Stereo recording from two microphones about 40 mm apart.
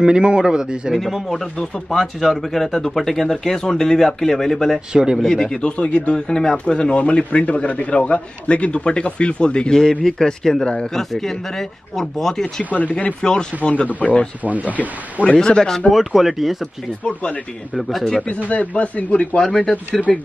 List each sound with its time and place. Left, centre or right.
0.0 s a man's voice: right
0.9 s speech: centre
4.7 s a man's voice: centre
5.2 s speech: centre
5.6 s a man's voice: left
9.8 s a man's voice: centre
14.0 s speech: left
14.4 s speech: right
15.4 s a man's voice: centre
15.9 s speech: centre
17.0 s speech: left
17.7 s speech: centre
18.3 s speech: left
19.4 s speech: centre